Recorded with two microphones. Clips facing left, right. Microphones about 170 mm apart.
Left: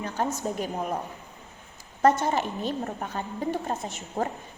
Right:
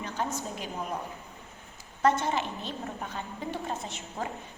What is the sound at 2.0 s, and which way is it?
A woman's voice, 45° left (ahead or behind).